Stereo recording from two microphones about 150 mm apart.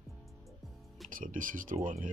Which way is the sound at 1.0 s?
60° right (ahead or behind).